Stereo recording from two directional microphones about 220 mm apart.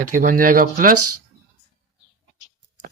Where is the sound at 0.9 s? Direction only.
90° right.